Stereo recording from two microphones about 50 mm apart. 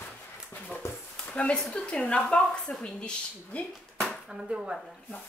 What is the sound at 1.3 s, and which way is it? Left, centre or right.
A woman's voice, left.